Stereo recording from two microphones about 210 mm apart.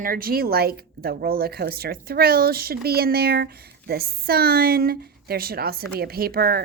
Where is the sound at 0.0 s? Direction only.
45° right (ahead or behind).